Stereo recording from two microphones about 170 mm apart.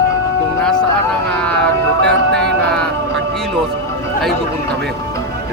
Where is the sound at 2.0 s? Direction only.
5° left (ahead or behind).